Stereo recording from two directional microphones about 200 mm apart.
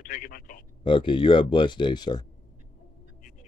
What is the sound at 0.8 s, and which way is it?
Speech, 25° left (ahead or behind).